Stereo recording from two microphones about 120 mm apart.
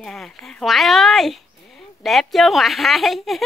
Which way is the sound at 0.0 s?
5° left (ahead or behind).